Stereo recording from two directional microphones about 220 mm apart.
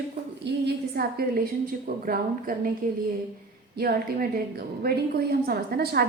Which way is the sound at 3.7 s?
45° right (ahead or behind).